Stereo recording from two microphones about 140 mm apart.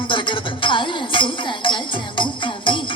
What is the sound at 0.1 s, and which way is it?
Music, 35° left (ahead or behind).